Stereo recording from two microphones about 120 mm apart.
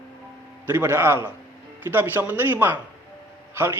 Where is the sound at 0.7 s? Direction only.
20° right (ahead or behind).